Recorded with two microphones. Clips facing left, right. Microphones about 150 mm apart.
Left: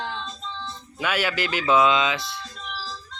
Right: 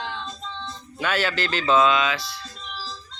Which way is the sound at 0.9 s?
10° left (ahead or behind).